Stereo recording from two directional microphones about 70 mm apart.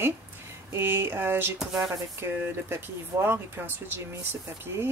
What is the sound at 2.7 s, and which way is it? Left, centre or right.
Speech, right.